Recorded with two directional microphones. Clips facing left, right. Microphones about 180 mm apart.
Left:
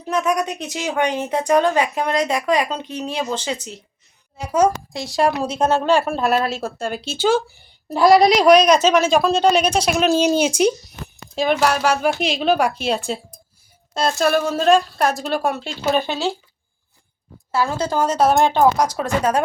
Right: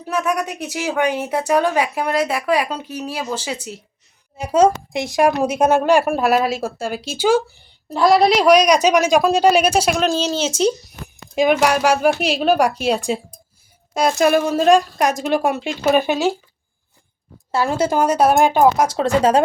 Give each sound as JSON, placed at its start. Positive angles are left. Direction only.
{"t": 0.1, "sound": "speech", "side_deg": -10}
{"t": 4.4, "sound": "a woman's voice", "side_deg": -25}
{"t": 7.9, "sound": "speech", "side_deg": 0}
{"t": 9.9, "sound": "speech", "side_deg": 5}
{"t": 11.3, "sound": "speech", "side_deg": -10}
{"t": 17.5, "sound": "speech", "side_deg": -20}
{"t": 18.9, "sound": "a woman's voice", "side_deg": -25}